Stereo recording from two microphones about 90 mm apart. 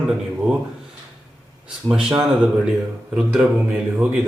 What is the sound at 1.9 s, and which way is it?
Speech, 5° right (ahead or behind).